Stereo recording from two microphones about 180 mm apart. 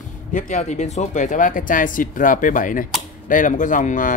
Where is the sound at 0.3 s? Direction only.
45° left (ahead or behind).